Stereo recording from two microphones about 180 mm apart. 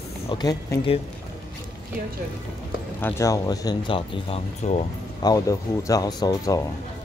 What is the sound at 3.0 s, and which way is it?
Speech, 15° left (ahead or behind).